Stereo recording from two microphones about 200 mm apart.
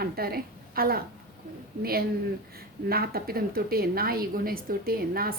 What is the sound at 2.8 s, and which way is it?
A woman's voice, 50° right (ahead or behind).